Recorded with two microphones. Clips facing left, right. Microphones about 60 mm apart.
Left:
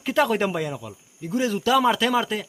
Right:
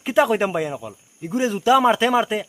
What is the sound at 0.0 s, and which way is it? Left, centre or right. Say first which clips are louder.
Speech: right 3 dB; centre.